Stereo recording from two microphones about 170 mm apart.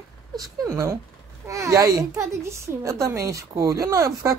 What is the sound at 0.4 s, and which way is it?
A child's voice, 15° right (ahead or behind).